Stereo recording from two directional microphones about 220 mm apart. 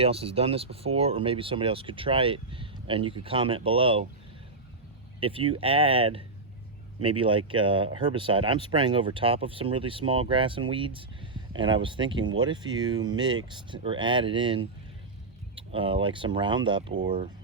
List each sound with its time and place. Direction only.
0.0 s speech: 25° right (ahead or behind)
5.2 s speech: 25° right (ahead or behind)